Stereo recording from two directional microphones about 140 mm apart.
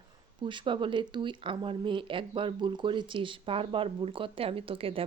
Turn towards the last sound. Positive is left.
turn(degrees=-40)  # may be behind; listen again after turning